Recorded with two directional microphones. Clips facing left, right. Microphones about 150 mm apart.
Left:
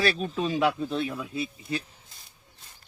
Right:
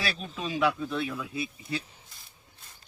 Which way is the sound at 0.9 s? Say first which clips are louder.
Left 2 dB; 20° left (ahead or behind).